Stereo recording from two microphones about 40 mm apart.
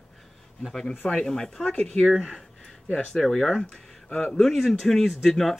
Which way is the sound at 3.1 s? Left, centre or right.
Centre.